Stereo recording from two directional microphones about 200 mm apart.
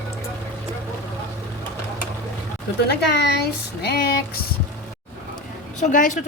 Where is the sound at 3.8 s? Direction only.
50° left (ahead or behind).